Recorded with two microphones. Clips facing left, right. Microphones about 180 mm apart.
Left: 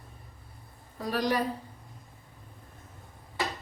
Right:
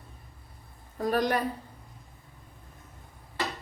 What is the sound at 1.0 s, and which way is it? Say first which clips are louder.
Speech: right 2 dB; 50° right (ahead or behind).